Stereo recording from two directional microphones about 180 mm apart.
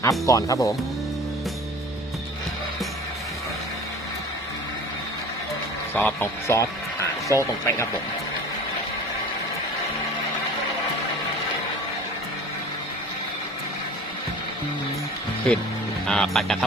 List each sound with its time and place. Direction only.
0.0 s speech: 20° left (ahead or behind)
5.9 s speech: 10° left (ahead or behind)
15.5 s speech: 5° left (ahead or behind)